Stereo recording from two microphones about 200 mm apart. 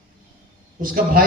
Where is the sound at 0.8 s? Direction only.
45° right (ahead or behind).